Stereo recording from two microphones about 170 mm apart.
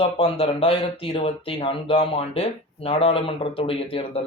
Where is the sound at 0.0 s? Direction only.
35° left (ahead or behind).